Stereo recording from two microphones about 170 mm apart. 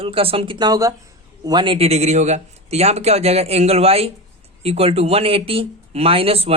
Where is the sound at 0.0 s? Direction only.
35° right (ahead or behind).